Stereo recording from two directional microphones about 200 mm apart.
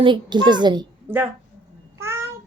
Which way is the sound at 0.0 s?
25° right (ahead or behind).